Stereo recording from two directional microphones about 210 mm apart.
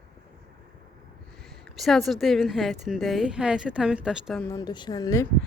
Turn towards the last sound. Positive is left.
turn(degrees=15)  # may be behind; listen again after turning